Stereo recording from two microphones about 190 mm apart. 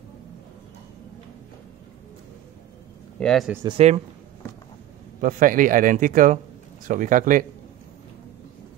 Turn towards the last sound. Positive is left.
turn(degrees=-45)  # may be behind; listen again after turning